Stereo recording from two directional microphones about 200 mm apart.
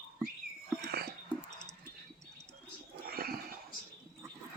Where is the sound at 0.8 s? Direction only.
50° right (ahead or behind).